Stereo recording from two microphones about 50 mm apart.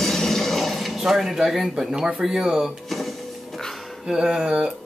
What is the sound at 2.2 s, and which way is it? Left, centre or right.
Speech, centre.